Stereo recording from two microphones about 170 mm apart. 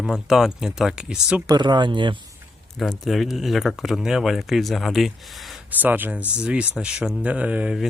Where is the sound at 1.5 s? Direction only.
25° right (ahead or behind).